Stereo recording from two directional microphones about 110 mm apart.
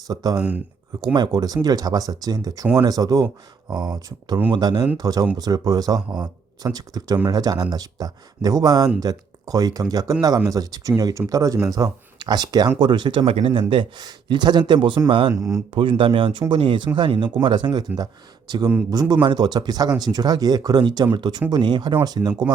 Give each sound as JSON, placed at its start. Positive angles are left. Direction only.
{"t": 0.1, "sound": "speech", "side_deg": -35}
{"t": 4.5, "sound": "speech", "side_deg": -40}
{"t": 13.3, "sound": "speech", "side_deg": -60}
{"t": 15.3, "sound": "speech", "side_deg": -25}
{"t": 15.7, "sound": "speech", "side_deg": -50}